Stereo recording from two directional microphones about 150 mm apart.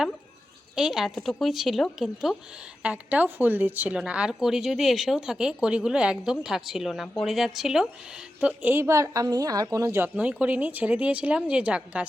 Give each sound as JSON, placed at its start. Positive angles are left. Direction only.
{"t": 0.8, "sound": "a woman's voice", "side_deg": -5}